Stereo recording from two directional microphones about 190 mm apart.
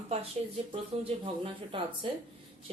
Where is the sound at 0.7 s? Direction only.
30° right (ahead or behind).